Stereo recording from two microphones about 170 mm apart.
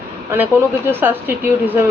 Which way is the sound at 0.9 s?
10° right (ahead or behind).